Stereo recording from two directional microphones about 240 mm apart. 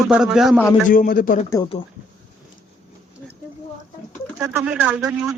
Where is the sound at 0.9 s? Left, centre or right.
Left.